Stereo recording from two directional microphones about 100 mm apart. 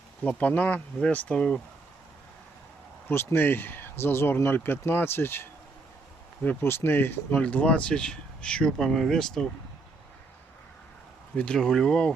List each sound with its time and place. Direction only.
0.3 s speech: 15° left (ahead or behind)
3.1 s speech: 25° left (ahead or behind); by 9.5 s 5° left (ahead or behind)
11.3 s speech: 10° left (ahead or behind)